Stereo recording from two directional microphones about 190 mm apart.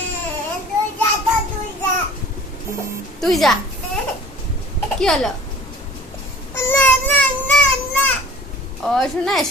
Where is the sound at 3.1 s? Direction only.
Centre (ahead or behind).